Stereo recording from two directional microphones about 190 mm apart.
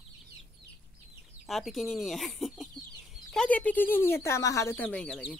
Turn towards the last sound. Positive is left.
turn(degrees=5)  # may be behind; listen again after turning